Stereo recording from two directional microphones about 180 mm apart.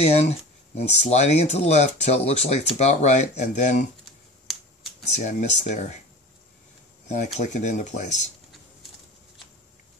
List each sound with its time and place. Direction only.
0.0 s speech: 35° left (ahead or behind)
4.0 s finger snapping: centre (ahead or behind)
5.1 s speech: 40° left (ahead or behind)
7.3 s speech: 40° left (ahead or behind)